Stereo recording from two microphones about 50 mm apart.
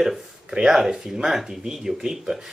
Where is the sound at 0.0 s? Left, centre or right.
Centre.